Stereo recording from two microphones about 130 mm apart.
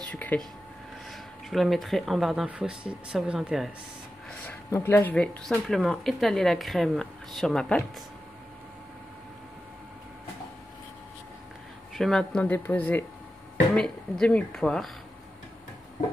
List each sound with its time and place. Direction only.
0.1 s a sound: 15° left (ahead or behind)
1.1 s speech: centre (ahead or behind)
4.6 s speech: 20° left (ahead or behind)
5.1 s speech: 10° left (ahead or behind)
11.9 s speech: 5° left (ahead or behind)